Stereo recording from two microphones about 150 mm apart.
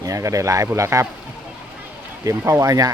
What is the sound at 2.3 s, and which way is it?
Speech, 20° right (ahead or behind).